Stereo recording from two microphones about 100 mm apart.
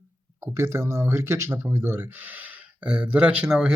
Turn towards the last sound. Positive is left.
turn(degrees=-10)  # may be behind; listen again after turning